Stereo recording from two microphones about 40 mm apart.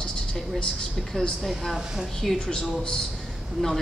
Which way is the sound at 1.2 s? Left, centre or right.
Centre.